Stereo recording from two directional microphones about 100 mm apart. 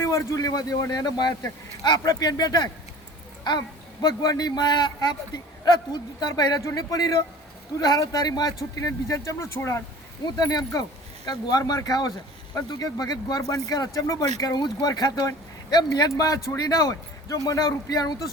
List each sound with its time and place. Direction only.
0.0 s speech: 30° left (ahead or behind)
4.0 s speech: 40° left (ahead or behind)
10.4 s speech: 40° left (ahead or behind)